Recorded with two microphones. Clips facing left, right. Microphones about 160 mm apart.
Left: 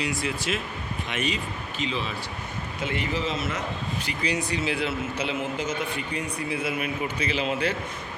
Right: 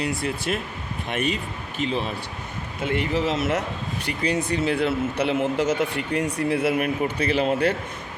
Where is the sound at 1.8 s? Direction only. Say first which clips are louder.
Right 4 dB; 55° right (ahead or behind); by 3.6 s 75° right (ahead or behind).